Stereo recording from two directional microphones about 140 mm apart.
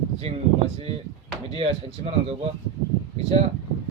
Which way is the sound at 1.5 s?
45° right (ahead or behind).